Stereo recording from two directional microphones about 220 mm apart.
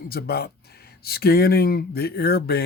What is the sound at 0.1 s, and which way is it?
Speech, 45° left (ahead or behind).